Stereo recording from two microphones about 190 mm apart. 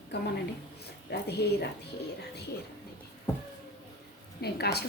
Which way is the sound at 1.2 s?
60° left (ahead or behind).